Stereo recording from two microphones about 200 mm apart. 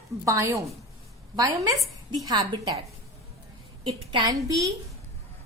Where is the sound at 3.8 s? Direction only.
25° right (ahead or behind).